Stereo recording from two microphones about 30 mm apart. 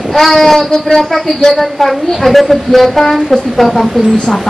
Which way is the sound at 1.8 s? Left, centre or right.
Centre.